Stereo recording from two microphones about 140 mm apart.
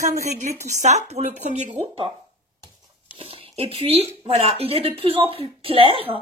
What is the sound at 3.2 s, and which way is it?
Speech, 45° right (ahead or behind).